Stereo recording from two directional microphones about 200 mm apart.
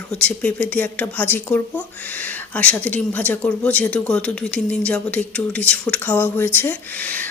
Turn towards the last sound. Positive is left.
turn(degrees=10)  # may be behind; listen again after turning